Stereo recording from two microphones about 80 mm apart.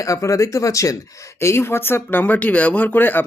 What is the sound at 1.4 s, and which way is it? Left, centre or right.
Speech, left.